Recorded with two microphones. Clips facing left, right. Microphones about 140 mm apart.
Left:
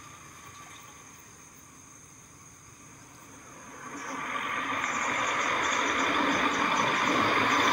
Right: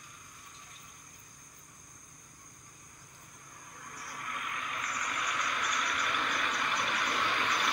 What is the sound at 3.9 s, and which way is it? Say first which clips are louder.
Vehicle: left 7 dB; 55° left (ahead or behind).